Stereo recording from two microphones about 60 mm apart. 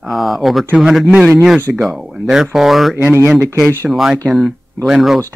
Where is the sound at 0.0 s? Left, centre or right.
Centre.